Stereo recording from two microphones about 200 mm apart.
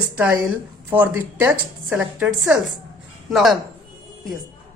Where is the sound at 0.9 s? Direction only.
10° right (ahead or behind).